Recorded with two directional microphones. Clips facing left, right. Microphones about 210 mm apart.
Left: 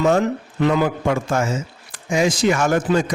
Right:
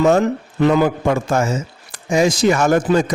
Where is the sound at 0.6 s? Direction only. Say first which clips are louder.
Right 3 dB; 45° right (ahead or behind).